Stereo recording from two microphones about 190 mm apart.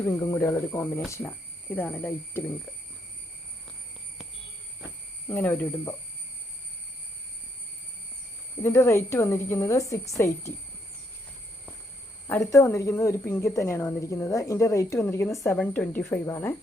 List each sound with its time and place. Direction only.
0.0 s a woman's voice: 15° left (ahead or behind)
5.3 s a woman's voice: 10° left (ahead or behind)
8.6 s a woman's voice: 15° left (ahead or behind)
12.3 s a woman's voice: 15° left (ahead or behind)